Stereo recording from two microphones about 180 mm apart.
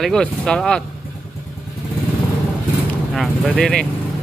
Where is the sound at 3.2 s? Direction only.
5° left (ahead or behind).